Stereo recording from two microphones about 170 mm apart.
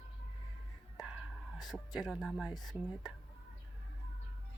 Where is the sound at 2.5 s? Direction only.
25° left (ahead or behind).